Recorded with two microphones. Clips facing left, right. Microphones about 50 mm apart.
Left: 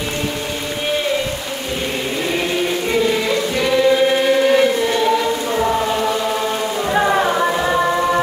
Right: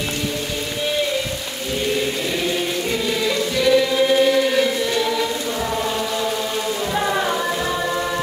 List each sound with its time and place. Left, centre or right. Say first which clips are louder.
3.5 s choir: left 2 dB; left
6.9 s music: left 6 dB; left